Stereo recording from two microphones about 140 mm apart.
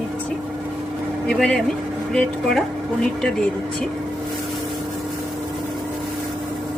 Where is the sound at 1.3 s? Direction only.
5° left (ahead or behind).